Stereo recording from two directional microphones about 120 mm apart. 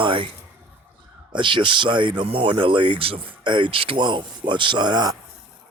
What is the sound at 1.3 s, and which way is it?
Speech, 40° right (ahead or behind).